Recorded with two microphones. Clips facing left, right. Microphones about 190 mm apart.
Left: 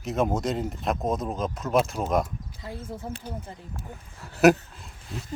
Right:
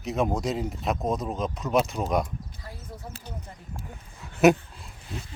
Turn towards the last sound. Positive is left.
turn(degrees=0)  # may be behind; listen again after turning